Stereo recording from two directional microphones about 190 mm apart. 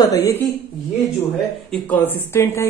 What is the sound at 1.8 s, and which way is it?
Speech, 10° left (ahead or behind).